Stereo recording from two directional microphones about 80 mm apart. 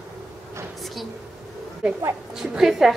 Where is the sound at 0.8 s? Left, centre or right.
Centre.